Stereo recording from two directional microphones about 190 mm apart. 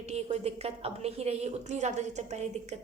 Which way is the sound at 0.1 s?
35° right (ahead or behind).